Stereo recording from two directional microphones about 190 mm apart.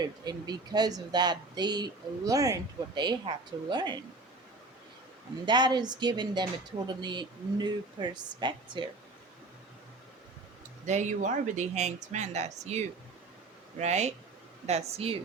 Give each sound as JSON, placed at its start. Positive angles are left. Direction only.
{"t": 0.0, "sound": "speech", "side_deg": -20}
{"t": 5.5, "sound": "speech", "side_deg": -25}
{"t": 10.8, "sound": "speech", "side_deg": -40}